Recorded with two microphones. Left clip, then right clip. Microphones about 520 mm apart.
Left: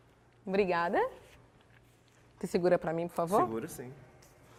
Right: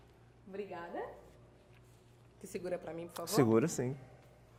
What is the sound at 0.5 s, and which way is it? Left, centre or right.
Speech, left.